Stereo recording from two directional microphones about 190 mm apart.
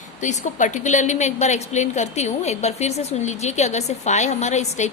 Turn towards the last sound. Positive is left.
turn(degrees=35)  # may be behind; listen again after turning